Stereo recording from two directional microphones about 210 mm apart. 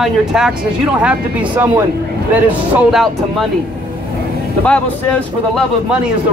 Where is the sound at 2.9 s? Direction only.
Centre (ahead or behind).